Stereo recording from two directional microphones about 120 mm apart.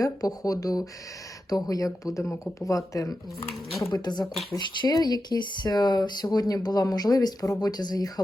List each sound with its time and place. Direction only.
0.0 s speech: 30° left (ahead or behind)
3.4 s speech: centre (ahead or behind)
3.9 s speech: 35° left (ahead or behind)